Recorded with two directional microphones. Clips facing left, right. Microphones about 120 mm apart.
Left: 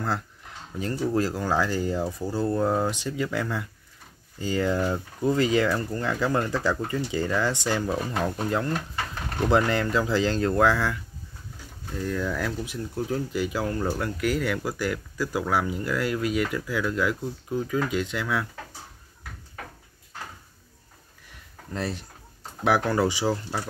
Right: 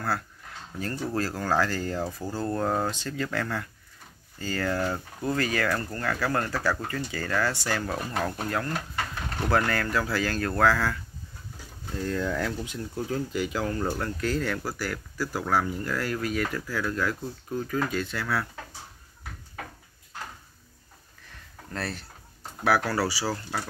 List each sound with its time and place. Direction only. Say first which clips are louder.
0.7 s speech: left 4 dB; 15° left (ahead or behind)
11.9 s speech: even; centre (ahead or behind)
21.3 s a sound: left 2 dB; 15° left (ahead or behind)
22.6 s speech: left 2 dB; 20° left (ahead or behind)